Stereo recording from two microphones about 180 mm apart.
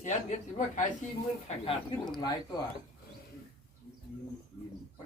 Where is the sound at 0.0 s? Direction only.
40° left (ahead or behind).